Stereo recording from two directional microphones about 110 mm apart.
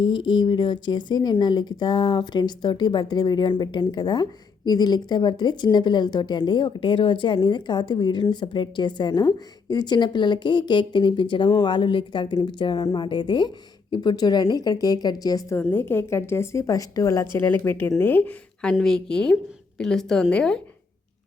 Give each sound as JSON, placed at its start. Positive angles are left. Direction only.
{"t": 0.0, "sound": "a woman's voice", "side_deg": 45}
{"t": 15.5, "sound": "a woman's voice", "side_deg": 20}
{"t": 17.4, "sound": "a woman's voice", "side_deg": 15}